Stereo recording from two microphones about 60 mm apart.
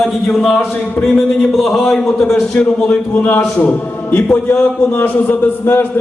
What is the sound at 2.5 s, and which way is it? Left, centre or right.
Speech, left.